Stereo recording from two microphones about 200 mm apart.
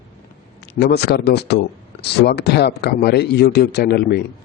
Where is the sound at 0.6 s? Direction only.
55° left (ahead or behind).